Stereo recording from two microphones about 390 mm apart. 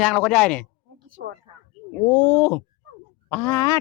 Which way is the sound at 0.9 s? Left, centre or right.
Right.